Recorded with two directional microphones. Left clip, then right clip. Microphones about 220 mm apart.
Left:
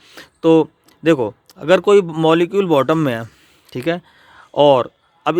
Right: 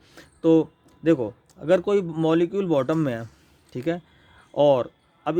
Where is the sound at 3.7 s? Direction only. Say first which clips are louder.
Left 7 dB; 30° left (ahead or behind).